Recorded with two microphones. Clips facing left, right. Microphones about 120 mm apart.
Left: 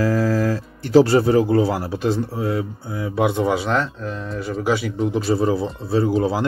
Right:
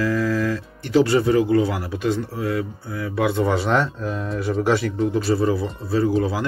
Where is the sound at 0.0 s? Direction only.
40° left (ahead or behind); by 3.5 s 20° left (ahead or behind).